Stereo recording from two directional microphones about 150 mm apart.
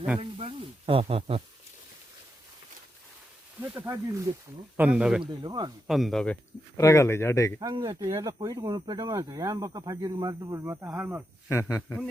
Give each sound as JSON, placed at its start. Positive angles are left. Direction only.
{"t": 0.2, "sound": "snake", "side_deg": -40}
{"t": 3.6, "sound": "speech", "side_deg": -10}
{"t": 5.2, "sound": "speech", "side_deg": -35}
{"t": 5.9, "sound": "speech", "side_deg": 0}
{"t": 6.7, "sound": "speech", "side_deg": 20}
{"t": 7.6, "sound": "speech", "side_deg": -30}
{"t": 11.4, "sound": "speech", "side_deg": 20}